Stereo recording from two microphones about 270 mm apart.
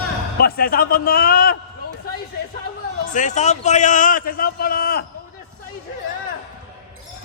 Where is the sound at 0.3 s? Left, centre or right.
Left.